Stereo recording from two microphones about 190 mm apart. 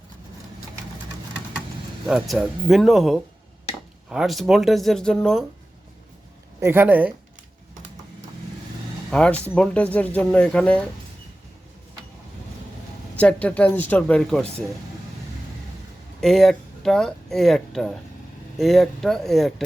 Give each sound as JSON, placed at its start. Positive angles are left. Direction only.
{"t": 2.0, "sound": "speech", "side_deg": 0}
{"t": 6.6, "sound": "speech", "side_deg": -10}
{"t": 9.0, "sound": "speech", "side_deg": 5}
{"t": 13.1, "sound": "speech", "side_deg": 5}
{"t": 16.2, "sound": "speech", "side_deg": 0}